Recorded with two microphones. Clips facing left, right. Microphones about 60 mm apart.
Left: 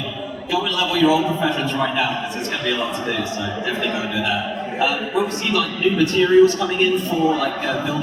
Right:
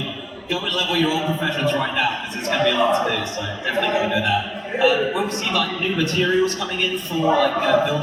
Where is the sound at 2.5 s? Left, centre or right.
Right.